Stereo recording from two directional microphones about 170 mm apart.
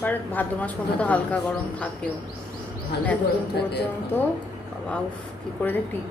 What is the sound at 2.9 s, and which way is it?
Speech, 75° left (ahead or behind).